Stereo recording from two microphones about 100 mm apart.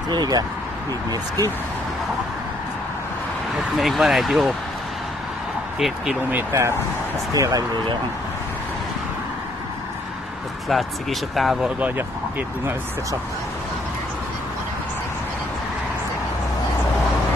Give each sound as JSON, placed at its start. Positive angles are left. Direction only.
{"t": 0.1, "sound": "speech", "side_deg": -45}
{"t": 3.5, "sound": "speech", "side_deg": 0}
{"t": 5.8, "sound": "speech", "side_deg": 0}
{"t": 6.3, "sound": "speech", "side_deg": -30}
{"t": 10.7, "sound": "speech", "side_deg": 0}